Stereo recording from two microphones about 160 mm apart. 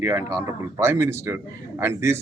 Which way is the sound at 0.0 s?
25° right (ahead or behind).